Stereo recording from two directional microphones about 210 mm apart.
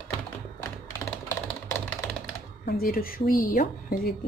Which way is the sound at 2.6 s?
45° left (ahead or behind).